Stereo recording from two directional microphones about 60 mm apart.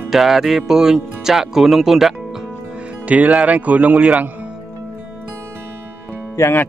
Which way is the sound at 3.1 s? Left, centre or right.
Right.